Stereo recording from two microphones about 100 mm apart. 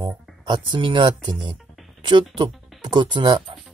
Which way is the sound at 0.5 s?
55° right (ahead or behind).